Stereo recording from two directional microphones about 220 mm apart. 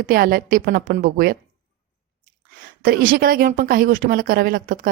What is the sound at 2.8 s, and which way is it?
A woman's voice, 40° right (ahead or behind).